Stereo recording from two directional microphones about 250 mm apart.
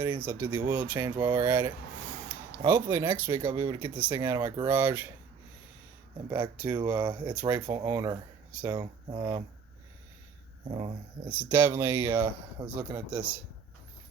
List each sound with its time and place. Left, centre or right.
0.0 s speech: centre
1.1 s speech: centre
6.2 s speech: centre
7.3 s speech: centre
10.7 s speech: right
11.3 s speech: centre